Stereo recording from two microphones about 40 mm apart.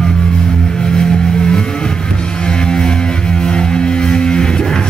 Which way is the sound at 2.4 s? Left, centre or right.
Left.